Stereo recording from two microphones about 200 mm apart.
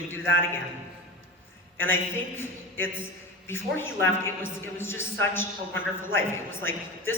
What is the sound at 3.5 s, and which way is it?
A woman's voice, 10° left (ahead or behind).